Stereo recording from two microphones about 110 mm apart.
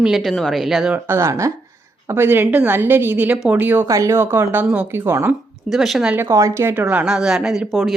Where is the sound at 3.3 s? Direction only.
5° right (ahead or behind).